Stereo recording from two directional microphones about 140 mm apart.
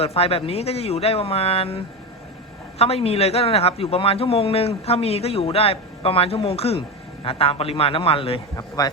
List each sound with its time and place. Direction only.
0.0 s a man's voice: 45° left (ahead or behind)
8.5 s speech: 25° left (ahead or behind)